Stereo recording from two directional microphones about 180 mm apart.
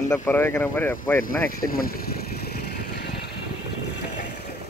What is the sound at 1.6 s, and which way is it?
Vehicle, 55° left (ahead or behind).